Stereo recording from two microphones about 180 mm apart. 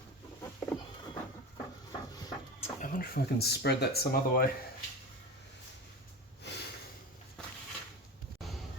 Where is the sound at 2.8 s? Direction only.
50° left (ahead or behind).